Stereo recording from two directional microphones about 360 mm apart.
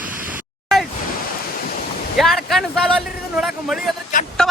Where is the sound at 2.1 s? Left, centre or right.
Centre.